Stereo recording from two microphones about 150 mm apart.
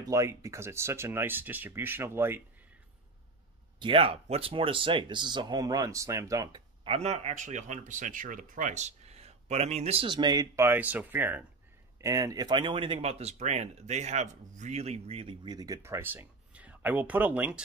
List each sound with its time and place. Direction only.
0.0 s speech: 20° right (ahead or behind)
3.8 s speech: 40° right (ahead or behind); by 6.6 s 25° right (ahead or behind)
6.8 s speech: 40° right (ahead or behind); by 17.6 s 10° right (ahead or behind)